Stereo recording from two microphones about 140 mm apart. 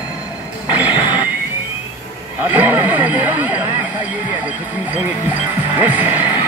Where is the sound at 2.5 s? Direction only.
15° right (ahead or behind).